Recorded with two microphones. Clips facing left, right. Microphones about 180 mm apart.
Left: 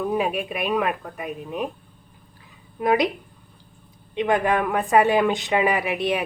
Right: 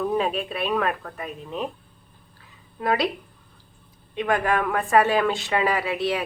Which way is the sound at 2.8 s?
15° left (ahead or behind).